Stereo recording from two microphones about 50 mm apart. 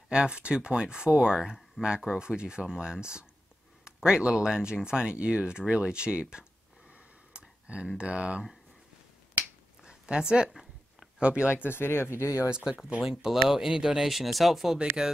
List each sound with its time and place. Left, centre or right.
0.1 s speech: centre
6.9 s a sound: right
8.0 s speech: right
9.8 s speech: centre
10.5 s a sound: centre
11.1 s speech: right
11.5 s speech: left
12.4 s speech: centre